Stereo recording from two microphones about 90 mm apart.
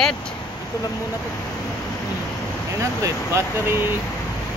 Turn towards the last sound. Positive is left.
turn(degrees=-30)  # may be behind; listen again after turning